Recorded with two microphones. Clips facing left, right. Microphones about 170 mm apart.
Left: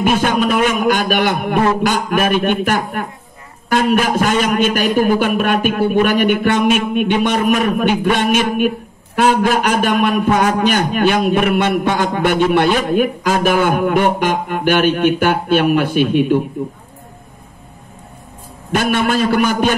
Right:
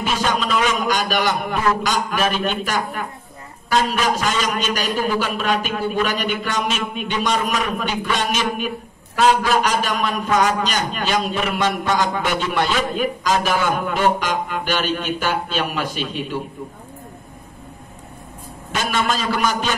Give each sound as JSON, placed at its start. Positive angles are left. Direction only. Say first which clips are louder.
{"t": 0.0, "sound": "a man's voice", "louder": "left 7 dB", "side_deg": 55}
{"t": 18.7, "sound": "a man's voice", "louder": "left 6 dB", "side_deg": 55}